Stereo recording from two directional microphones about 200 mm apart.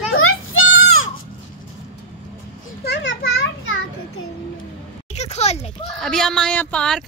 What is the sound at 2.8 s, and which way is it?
Children playing, 60° left (ahead or behind).